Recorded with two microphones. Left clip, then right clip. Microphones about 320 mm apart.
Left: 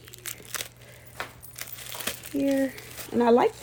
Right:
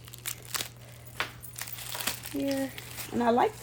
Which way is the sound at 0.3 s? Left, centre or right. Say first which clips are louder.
Even; centre.